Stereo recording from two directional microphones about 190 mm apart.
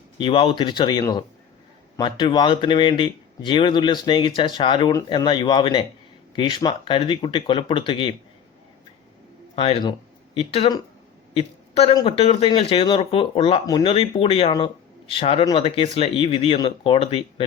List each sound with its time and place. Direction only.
0.2 s speech: 30° left (ahead or behind)
9.6 s a woman's voice: 30° left (ahead or behind)